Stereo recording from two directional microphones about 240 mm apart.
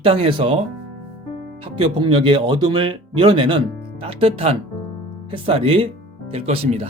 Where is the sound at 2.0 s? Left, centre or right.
Right.